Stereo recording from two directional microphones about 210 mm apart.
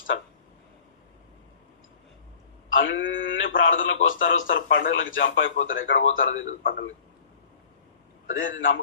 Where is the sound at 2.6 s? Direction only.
65° left (ahead or behind).